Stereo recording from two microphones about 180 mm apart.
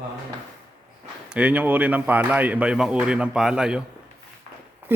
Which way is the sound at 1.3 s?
5° right (ahead or behind).